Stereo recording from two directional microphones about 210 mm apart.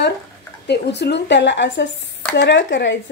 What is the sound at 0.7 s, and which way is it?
A woman's voice, 55° left (ahead or behind).